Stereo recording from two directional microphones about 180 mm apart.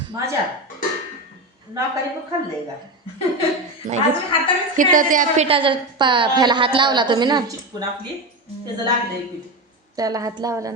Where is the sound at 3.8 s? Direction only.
50° right (ahead or behind); by 7.9 s 20° right (ahead or behind).